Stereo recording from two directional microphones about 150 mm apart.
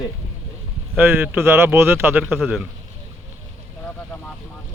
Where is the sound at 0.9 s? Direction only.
15° right (ahead or behind).